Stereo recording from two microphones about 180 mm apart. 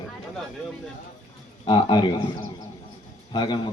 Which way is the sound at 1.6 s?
25° left (ahead or behind).